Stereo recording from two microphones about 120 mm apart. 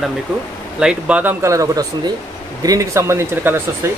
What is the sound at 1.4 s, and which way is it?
Speech, 25° right (ahead or behind).